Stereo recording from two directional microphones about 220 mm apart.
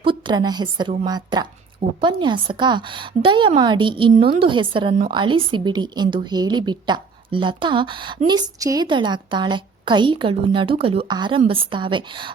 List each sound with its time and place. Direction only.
0.0 s a woman's voice: 20° right (ahead or behind)